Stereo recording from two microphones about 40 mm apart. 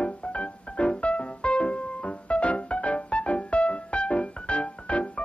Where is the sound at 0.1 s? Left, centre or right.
Left.